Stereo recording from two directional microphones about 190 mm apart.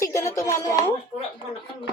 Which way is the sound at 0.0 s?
15° left (ahead or behind).